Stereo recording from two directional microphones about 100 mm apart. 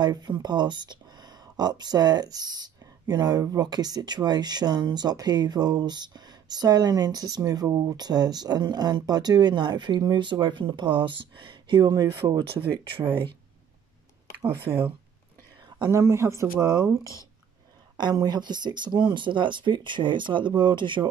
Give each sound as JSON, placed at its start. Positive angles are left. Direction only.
{"t": 0.0, "sound": "speech", "side_deg": -45}
{"t": 14.5, "sound": "speech", "side_deg": -20}
{"t": 15.9, "sound": "speech", "side_deg": -30}
{"t": 17.9, "sound": "speech", "side_deg": -45}